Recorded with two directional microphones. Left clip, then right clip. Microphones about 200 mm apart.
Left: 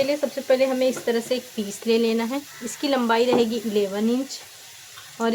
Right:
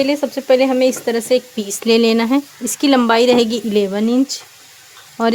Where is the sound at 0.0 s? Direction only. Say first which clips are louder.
Right 6 dB; 50° right (ahead or behind).